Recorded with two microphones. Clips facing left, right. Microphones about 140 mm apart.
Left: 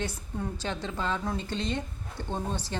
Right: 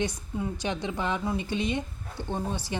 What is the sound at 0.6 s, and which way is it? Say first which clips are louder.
A woman's voice: right 2 dB; 15° right (ahead or behind).